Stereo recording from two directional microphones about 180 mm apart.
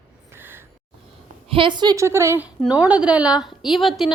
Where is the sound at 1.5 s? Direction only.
25° right (ahead or behind).